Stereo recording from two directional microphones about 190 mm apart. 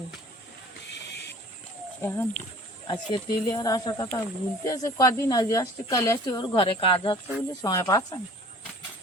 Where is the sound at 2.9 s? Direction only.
25° left (ahead or behind).